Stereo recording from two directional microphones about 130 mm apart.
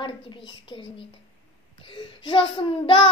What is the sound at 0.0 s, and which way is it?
Child singing, 40° left (ahead or behind).